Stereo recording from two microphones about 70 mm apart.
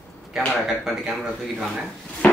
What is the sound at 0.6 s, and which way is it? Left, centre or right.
Speech, centre.